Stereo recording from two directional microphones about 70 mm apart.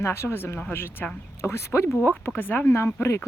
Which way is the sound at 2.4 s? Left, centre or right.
Left.